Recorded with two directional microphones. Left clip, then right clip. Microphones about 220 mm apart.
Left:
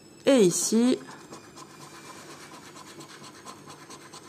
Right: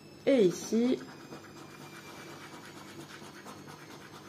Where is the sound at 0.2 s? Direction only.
35° left (ahead or behind).